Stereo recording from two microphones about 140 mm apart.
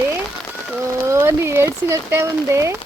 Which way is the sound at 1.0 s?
15° right (ahead or behind).